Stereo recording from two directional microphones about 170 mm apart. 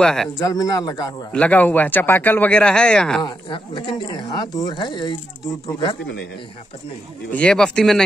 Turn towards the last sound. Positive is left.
turn(degrees=5)  # may be behind; listen again after turning